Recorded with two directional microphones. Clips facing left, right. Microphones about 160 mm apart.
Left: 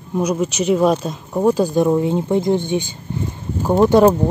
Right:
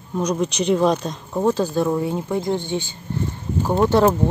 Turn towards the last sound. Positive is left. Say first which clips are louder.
# left 4 dB
turn(degrees=15)  # may be behind; listen again after turning